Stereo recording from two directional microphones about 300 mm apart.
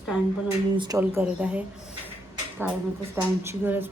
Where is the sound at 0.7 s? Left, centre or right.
Centre.